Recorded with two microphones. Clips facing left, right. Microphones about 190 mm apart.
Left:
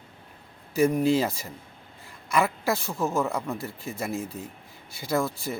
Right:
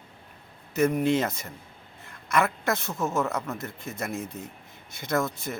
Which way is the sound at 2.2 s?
10° left (ahead or behind).